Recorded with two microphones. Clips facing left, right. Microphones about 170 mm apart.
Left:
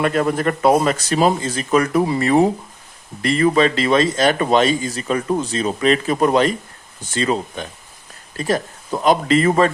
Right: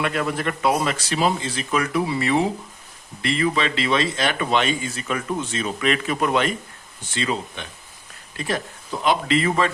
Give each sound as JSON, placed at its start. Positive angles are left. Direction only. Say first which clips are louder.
{"t": 0.0, "sound": "speech", "louder": "left 6 dB", "side_deg": 40}